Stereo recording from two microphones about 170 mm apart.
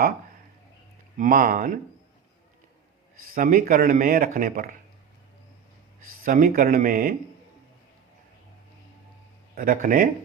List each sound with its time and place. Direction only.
1.1 s speech: 50° right (ahead or behind)
3.3 s speech: 55° right (ahead or behind)
6.2 s speech: 55° right (ahead or behind)
9.6 s speech: 50° right (ahead or behind)